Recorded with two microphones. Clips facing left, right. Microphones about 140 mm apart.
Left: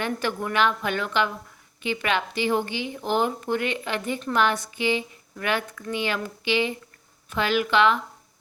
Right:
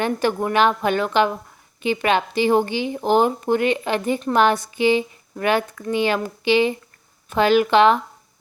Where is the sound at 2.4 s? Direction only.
40° right (ahead or behind).